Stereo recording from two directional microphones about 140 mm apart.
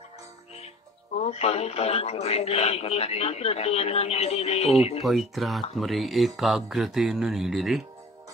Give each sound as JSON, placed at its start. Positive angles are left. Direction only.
{"t": 1.1, "sound": "speech", "side_deg": 50}
{"t": 5.0, "sound": "speech", "side_deg": 0}